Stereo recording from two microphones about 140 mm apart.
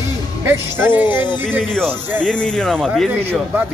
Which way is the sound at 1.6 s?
5° left (ahead or behind).